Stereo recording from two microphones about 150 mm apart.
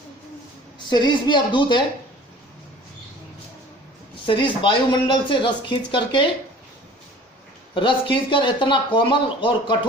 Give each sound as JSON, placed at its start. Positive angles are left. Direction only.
{"t": 0.9, "sound": "speech", "side_deg": 30}
{"t": 4.3, "sound": "speech", "side_deg": 35}
{"t": 7.7, "sound": "speech", "side_deg": 35}